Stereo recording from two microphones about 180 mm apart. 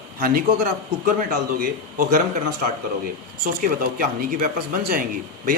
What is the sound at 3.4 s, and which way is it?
A man's voice, 55° right (ahead or behind).